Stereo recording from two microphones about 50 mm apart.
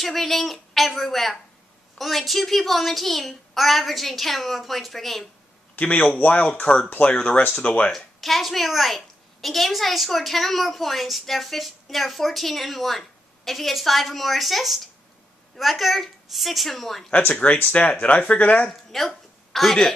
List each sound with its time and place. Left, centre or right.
0.0 s a woman's voice: centre
5.8 s a man's voice: left
7.9 s a woman's voice: centre
17.1 s speech: left
18.7 s a sound: centre